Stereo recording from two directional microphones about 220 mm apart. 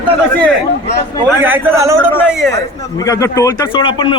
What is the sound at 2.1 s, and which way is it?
Speech, 10° left (ahead or behind).